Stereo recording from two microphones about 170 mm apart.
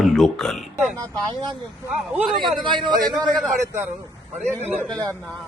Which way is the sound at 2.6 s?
30° right (ahead or behind).